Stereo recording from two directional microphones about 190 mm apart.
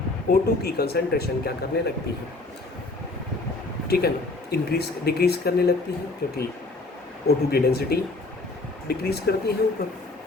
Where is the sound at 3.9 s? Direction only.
55° left (ahead or behind).